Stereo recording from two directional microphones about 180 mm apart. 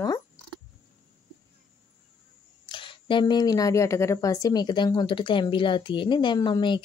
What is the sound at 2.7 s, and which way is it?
Speech, 30° left (ahead or behind).